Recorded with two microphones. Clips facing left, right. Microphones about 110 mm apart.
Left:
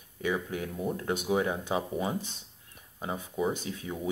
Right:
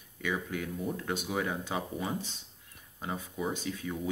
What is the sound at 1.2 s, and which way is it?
Speech, 20° left (ahead or behind).